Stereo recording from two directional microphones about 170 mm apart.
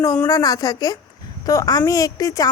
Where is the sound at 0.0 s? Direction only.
20° left (ahead or behind).